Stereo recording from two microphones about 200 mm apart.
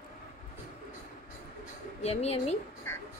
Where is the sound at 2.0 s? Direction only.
30° left (ahead or behind).